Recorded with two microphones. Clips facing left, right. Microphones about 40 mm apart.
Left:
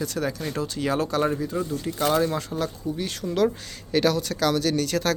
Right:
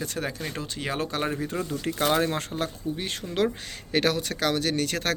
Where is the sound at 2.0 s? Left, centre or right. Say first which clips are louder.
Left 2 dB; right.